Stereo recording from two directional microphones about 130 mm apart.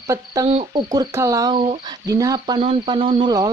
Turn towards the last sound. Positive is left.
turn(degrees=-40)  # may be behind; listen again after turning